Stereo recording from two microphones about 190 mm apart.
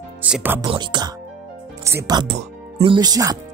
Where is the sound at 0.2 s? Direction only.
10° right (ahead or behind).